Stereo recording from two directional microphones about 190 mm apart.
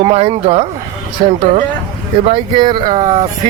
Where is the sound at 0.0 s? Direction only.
35° right (ahead or behind).